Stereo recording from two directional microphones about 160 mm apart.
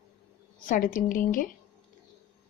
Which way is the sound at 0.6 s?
55° left (ahead or behind).